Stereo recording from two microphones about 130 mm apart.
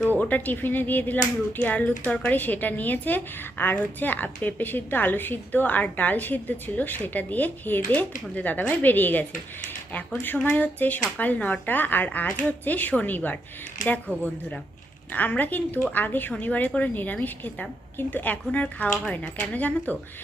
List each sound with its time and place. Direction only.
0.2 s a woman's voice: 15° left (ahead or behind)
15.1 s a woman's voice: 10° left (ahead or behind)